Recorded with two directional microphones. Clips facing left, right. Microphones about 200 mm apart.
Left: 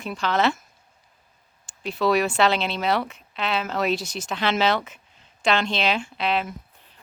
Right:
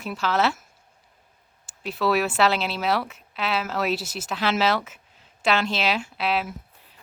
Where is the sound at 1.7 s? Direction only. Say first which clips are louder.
Left 2 dB; 5° right (ahead or behind).